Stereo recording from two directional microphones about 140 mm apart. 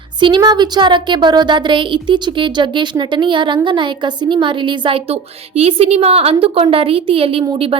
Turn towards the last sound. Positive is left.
turn(degrees=-35)  # may be behind; listen again after turning